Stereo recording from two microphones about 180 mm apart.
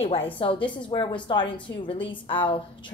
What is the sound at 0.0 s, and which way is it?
A woman's voice, 30° left (ahead or behind).